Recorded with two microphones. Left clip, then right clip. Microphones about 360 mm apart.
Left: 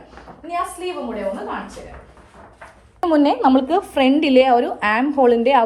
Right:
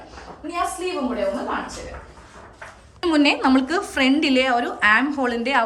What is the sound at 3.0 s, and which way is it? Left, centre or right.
A woman's voice, centre.